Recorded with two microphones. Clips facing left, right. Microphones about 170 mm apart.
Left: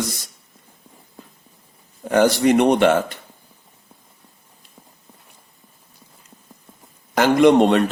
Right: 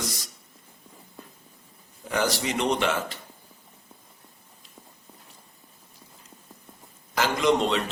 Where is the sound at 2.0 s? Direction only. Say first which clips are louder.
Left 11 dB; 55° left (ahead or behind).